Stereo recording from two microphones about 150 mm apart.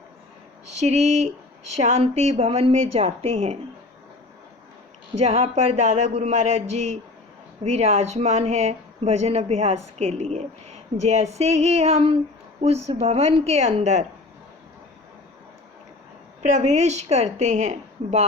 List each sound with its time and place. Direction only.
0.7 s speech: 50° right (ahead or behind)
5.2 s speech: 40° right (ahead or behind)
16.4 s speech: 50° right (ahead or behind)